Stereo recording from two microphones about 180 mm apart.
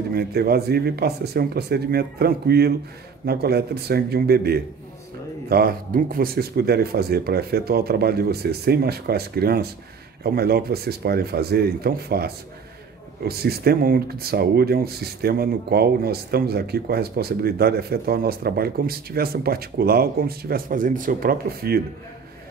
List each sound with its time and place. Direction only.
0.1 s speech: 60° right (ahead or behind)